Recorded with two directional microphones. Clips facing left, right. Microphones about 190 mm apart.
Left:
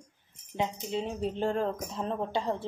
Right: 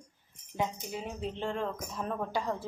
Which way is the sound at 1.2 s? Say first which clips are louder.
Left 4 dB; 40° left (ahead or behind).